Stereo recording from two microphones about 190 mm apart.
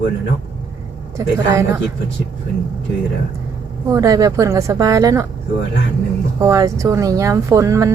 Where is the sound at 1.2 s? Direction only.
15° right (ahead or behind).